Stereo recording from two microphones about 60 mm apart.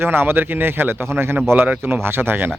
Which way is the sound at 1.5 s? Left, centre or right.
Right.